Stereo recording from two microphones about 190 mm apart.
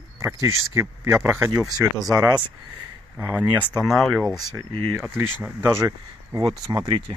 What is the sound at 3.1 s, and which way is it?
Speech, 10° right (ahead or behind).